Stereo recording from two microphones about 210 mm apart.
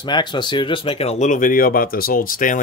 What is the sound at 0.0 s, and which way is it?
Speech, 20° left (ahead or behind).